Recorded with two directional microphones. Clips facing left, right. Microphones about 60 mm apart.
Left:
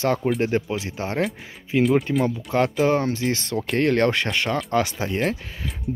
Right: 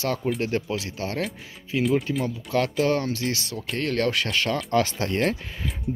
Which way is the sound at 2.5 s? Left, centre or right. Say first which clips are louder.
Left 2 dB; left.